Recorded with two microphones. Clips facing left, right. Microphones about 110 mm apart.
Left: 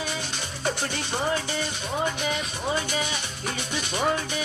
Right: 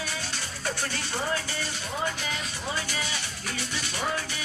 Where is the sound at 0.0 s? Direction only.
20° left (ahead or behind).